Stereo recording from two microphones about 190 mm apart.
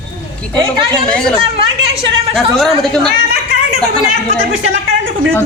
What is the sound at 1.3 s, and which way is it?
Speech, 30° right (ahead or behind).